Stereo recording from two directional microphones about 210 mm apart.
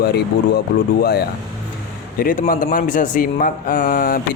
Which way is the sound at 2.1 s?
40° left (ahead or behind).